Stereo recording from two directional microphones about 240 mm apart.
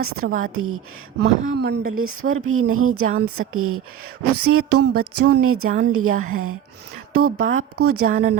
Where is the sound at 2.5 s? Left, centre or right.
Right.